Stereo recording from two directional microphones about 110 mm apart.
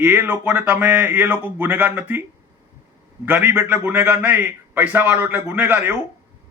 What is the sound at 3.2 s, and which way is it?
A man's voice, 20° right (ahead or behind).